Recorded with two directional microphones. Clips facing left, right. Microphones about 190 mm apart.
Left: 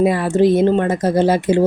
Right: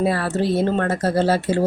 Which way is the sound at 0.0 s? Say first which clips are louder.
Left 6 dB; 15° left (ahead or behind).